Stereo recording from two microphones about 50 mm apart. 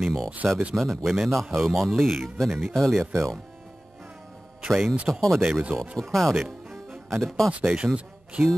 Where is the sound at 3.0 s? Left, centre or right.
Right.